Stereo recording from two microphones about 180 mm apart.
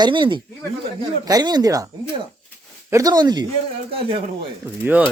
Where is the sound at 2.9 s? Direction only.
20° right (ahead or behind).